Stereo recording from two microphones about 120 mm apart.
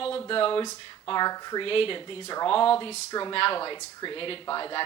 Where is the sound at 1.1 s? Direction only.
35° left (ahead or behind).